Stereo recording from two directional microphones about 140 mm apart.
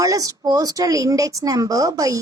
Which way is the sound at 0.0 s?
25° right (ahead or behind).